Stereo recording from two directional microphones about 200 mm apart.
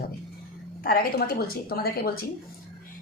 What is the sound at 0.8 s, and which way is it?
A woman's voice, 50° left (ahead or behind).